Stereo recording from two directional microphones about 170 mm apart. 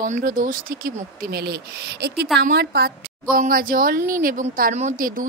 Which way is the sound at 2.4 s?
70° right (ahead or behind).